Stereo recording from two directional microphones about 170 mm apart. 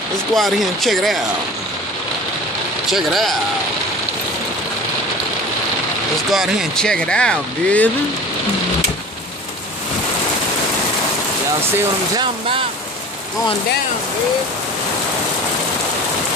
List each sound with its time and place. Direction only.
0.3 s speech: centre (ahead or behind)
2.9 s speech: centre (ahead or behind)
6.3 s speech: centre (ahead or behind)
12.2 s speech: 30° right (ahead or behind)